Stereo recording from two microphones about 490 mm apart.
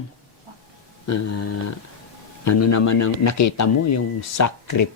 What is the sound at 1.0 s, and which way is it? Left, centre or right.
Speech, left.